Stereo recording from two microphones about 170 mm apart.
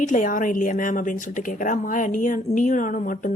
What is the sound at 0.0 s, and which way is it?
Speech, 50° left (ahead or behind).